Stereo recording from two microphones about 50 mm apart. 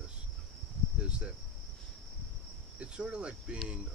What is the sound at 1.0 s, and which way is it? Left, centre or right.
Cricket, right.